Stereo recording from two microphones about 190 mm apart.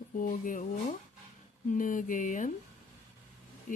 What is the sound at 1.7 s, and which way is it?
Speech, 45° left (ahead or behind).